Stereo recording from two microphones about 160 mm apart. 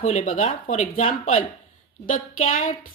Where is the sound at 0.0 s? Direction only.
45° left (ahead or behind).